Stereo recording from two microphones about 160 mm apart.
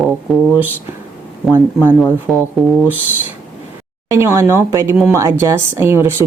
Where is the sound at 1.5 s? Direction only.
15° right (ahead or behind).